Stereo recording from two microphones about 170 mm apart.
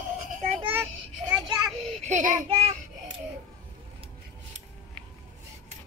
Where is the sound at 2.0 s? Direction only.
45° right (ahead or behind).